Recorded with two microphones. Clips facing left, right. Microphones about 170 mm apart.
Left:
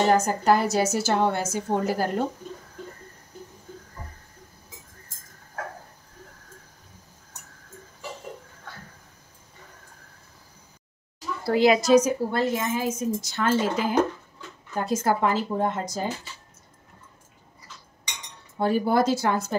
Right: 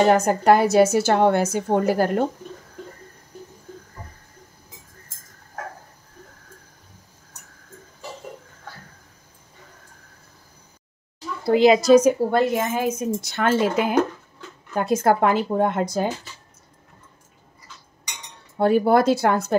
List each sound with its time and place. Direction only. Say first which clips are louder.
0.1 s a woman's voice: right 4 dB; 65° right (ahead or behind)
11.4 s a child's voice: right 4 dB; 20° right (ahead or behind)
11.9 s a woman's voice: right 5 dB; 60° right (ahead or behind)
18.6 s a woman's voice: right 5 dB; 60° right (ahead or behind)